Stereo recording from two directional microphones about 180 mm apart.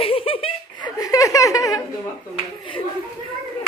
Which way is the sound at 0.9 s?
20° left (ahead or behind).